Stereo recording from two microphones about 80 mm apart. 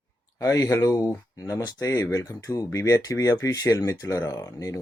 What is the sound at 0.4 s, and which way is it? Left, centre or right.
Speech, left.